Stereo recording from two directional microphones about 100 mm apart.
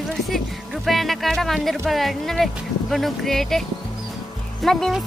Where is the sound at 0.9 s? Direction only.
Centre (ahead or behind).